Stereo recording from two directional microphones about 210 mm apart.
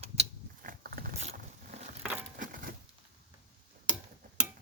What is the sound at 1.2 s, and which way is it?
Boat, 35° right (ahead or behind).